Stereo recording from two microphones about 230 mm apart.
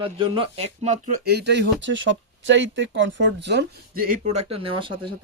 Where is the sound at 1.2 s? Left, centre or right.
Right.